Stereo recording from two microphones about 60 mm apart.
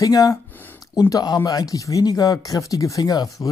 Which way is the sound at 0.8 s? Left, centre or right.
Left.